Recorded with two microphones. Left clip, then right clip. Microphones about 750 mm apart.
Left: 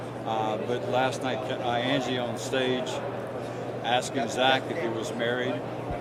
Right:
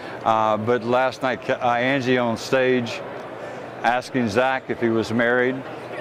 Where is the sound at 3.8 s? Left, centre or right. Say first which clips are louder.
Right 6 dB; right.